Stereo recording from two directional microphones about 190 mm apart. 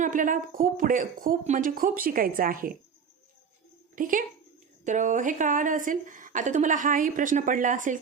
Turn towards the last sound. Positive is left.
turn(degrees=-40)  # may be behind; listen again after turning